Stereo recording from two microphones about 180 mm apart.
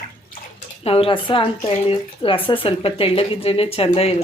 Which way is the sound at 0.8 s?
30° left (ahead or behind).